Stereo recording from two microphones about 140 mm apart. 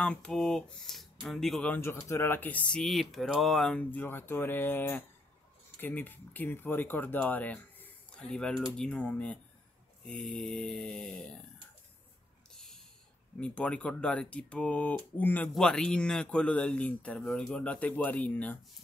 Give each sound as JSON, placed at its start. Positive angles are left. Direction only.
{"t": 0.0, "sound": "speech", "side_deg": 5}
{"t": 12.4, "sound": "snort", "side_deg": 5}
{"t": 13.4, "sound": "speech", "side_deg": 10}